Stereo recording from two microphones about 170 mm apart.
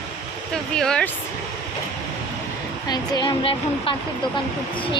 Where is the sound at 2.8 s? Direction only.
25° left (ahead or behind).